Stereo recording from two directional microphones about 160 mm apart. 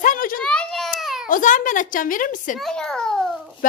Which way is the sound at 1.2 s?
55° left (ahead or behind).